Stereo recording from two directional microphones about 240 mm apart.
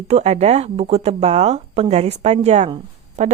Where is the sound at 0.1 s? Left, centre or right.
Right.